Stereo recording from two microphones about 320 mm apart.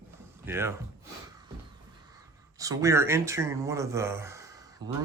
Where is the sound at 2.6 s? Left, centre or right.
Centre.